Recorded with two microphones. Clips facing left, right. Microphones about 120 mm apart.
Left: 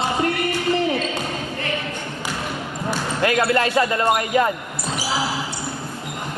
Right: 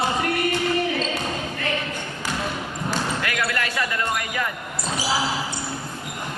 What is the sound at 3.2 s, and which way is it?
Speech, 30° left (ahead or behind).